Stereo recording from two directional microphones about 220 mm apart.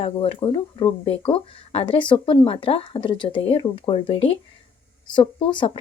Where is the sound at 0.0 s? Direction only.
25° left (ahead or behind).